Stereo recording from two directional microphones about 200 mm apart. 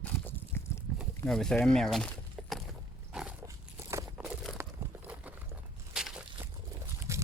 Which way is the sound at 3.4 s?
15° right (ahead or behind).